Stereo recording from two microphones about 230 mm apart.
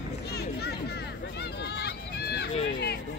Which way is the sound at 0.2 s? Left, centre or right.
Left.